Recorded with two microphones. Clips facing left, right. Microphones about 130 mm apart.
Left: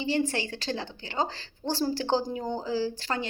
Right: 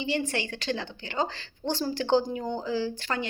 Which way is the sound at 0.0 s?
35° left (ahead or behind).